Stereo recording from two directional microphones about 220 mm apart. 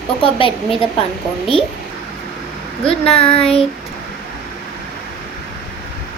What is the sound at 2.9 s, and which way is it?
Child singing, 25° left (ahead or behind).